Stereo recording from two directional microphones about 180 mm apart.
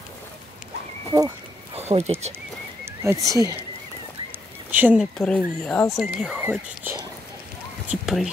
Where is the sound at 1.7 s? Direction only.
35° right (ahead or behind).